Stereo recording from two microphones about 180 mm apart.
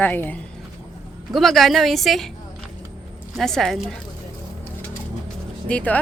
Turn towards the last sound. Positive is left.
turn(degrees=10)  # may be behind; listen again after turning